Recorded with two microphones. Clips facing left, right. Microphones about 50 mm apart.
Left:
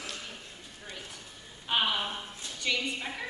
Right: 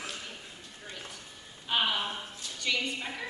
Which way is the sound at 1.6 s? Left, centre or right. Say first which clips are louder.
Even; centre.